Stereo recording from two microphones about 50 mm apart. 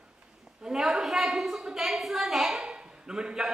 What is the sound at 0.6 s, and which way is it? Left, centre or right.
A woman's voice, centre.